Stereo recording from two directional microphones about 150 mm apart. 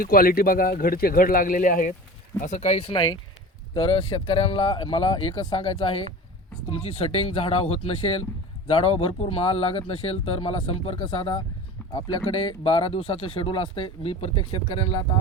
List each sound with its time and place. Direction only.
0.0 s speech: 75° left (ahead or behind)
2.4 s speech: 50° left (ahead or behind); by 15.0 s 35° left (ahead or behind)